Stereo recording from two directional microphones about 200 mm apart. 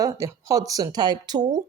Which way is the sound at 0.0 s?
15° right (ahead or behind).